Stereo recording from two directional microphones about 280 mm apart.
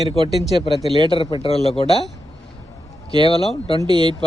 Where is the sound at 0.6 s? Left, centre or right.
Left.